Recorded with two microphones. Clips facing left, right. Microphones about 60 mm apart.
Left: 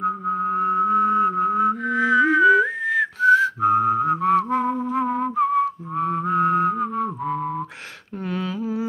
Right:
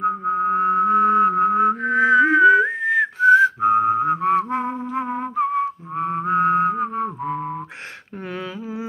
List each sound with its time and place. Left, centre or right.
0.2 s music: right
4.9 s whistling: centre
8.3 s a sound: centre